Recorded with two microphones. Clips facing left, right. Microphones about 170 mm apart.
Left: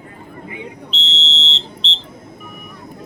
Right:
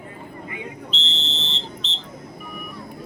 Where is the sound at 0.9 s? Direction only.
55° right (ahead or behind).